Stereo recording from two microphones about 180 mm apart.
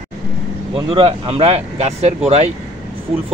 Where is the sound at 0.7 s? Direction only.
35° right (ahead or behind).